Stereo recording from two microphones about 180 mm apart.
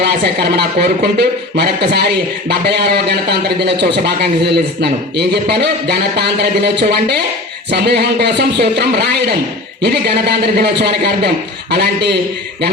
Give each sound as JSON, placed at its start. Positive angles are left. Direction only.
{"t": 0.0, "sound": "a man's voice", "side_deg": -65}